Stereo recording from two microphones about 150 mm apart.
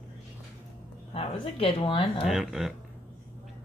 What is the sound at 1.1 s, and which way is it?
Speech, 40° left (ahead or behind).